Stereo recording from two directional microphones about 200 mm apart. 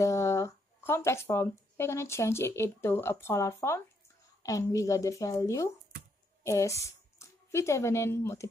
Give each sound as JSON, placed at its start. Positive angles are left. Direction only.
{"t": 0.0, "sound": "a woman's voice", "side_deg": 15}